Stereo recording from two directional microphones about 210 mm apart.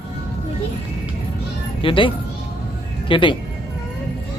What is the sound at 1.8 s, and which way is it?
Speech, 25° left (ahead or behind).